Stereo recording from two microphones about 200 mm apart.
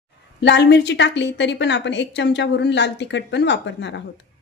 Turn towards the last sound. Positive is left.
turn(degrees=60)  # may be behind; listen again after turning